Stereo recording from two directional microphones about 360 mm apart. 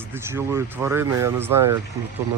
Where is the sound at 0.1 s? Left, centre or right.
Centre.